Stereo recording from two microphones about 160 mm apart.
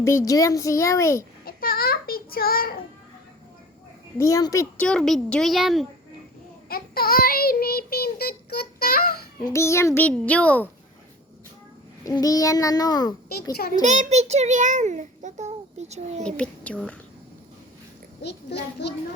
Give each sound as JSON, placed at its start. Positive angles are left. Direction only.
{"t": 0.0, "sound": "a child's voice", "side_deg": 20}
{"t": 1.5, "sound": "child singing", "side_deg": 70}
{"t": 4.2, "sound": "a child's voice", "side_deg": 20}
{"t": 4.8, "sound": "a child's voice", "side_deg": 5}
{"t": 6.7, "sound": "child singing", "side_deg": 70}
{"t": 9.4, "sound": "a child's voice", "side_deg": 20}
{"t": 12.0, "sound": "a child's voice", "side_deg": 20}
{"t": 13.8, "sound": "a child's voice", "side_deg": -50}
{"t": 16.2, "sound": "a child's voice", "side_deg": 5}
{"t": 18.2, "sound": "a child's voice", "side_deg": 90}